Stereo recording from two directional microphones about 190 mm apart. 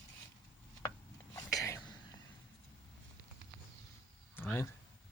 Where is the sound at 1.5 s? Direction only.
15° left (ahead or behind).